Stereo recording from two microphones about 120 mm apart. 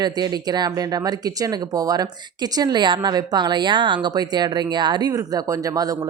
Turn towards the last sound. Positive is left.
turn(degrees=-30)  # may be behind; listen again after turning